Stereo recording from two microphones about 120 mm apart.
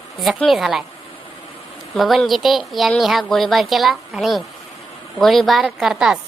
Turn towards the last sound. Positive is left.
turn(degrees=-5)  # may be behind; listen again after turning